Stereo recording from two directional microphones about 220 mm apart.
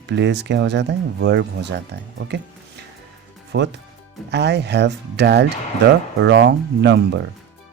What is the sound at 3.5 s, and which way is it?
Speech, 50° right (ahead or behind).